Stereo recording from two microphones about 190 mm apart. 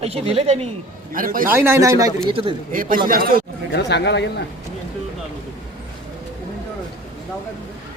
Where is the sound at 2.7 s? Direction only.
45° right (ahead or behind).